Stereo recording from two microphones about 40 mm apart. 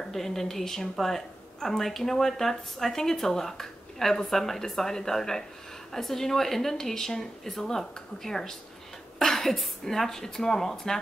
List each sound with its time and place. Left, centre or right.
0.1 s a woman's voice: centre